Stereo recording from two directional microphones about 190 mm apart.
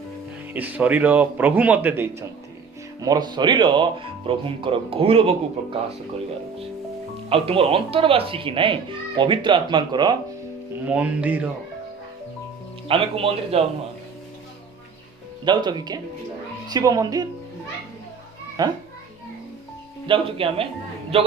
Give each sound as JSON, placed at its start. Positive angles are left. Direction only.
{"t": 0.5, "sound": "a man's voice", "side_deg": -10}
{"t": 7.3, "sound": "speech", "side_deg": -30}
{"t": 10.8, "sound": "a man's voice", "side_deg": -10}
{"t": 12.9, "sound": "a man's voice", "side_deg": -30}
{"t": 15.4, "sound": "speech", "side_deg": -20}
{"t": 18.6, "sound": "speech", "side_deg": -20}
{"t": 20.1, "sound": "a man's voice", "side_deg": -30}